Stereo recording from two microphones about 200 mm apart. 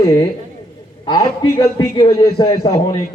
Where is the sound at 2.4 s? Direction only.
25° left (ahead or behind).